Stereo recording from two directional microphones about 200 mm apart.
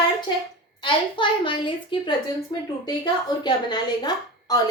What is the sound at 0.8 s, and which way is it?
A woman's voice, 25° left (ahead or behind).